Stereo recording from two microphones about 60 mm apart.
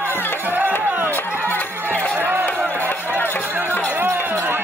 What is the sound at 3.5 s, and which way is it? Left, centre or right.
Music, right.